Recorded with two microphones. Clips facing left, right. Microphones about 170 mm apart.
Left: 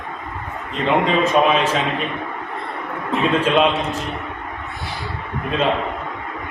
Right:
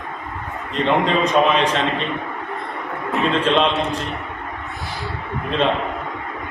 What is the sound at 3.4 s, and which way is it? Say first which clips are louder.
Speech: left 1 dB; 10° left (ahead or behind).